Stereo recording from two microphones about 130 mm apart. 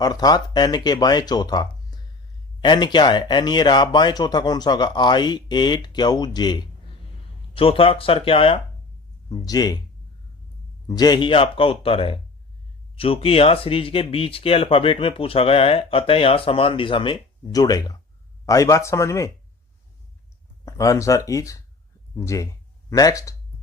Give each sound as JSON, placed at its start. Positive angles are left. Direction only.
{"t": 0.0, "sound": "speech", "side_deg": 30}
{"t": 7.5, "sound": "speech", "side_deg": 45}
{"t": 9.3, "sound": "speech", "side_deg": 30}
{"t": 10.8, "sound": "speech", "side_deg": 30}
{"t": 20.7, "sound": "speech", "side_deg": 25}